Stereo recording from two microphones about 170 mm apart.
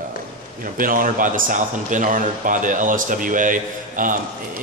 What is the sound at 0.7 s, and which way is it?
A man's voice, 55° right (ahead or behind).